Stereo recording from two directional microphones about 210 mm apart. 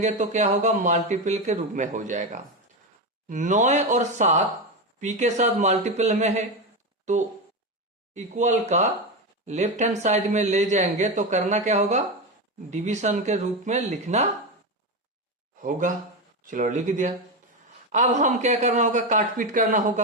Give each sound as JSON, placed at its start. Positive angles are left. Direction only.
{"t": 0.0, "sound": "speech", "side_deg": -35}
{"t": 8.1, "sound": "speech", "side_deg": -35}
{"t": 16.5, "sound": "speech", "side_deg": -35}